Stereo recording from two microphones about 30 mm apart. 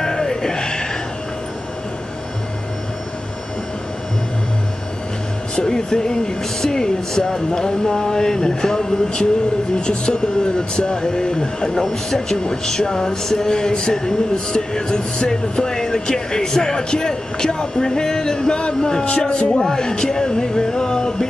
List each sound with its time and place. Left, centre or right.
0.0 s music: centre
5.6 s speech: left
8.5 s speech: left
19.0 s speech: left
19.3 s speech: left